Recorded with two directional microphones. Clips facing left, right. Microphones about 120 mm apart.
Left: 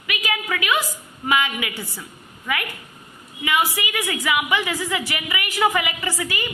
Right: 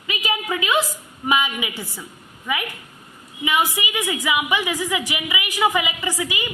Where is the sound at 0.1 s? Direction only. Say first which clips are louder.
Right 1 dB; 20° right (ahead or behind).